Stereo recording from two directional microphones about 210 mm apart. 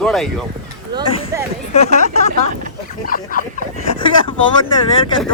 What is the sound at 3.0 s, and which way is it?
Speech, 40° left (ahead or behind).